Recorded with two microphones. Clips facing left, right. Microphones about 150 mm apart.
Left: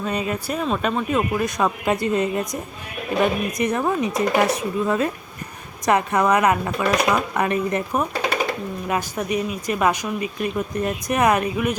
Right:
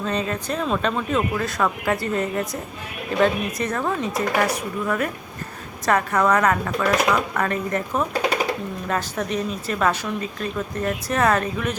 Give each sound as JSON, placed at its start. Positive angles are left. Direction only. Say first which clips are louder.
{"t": 0.0, "sound": "a woman's voice", "louder": "even", "side_deg": 10}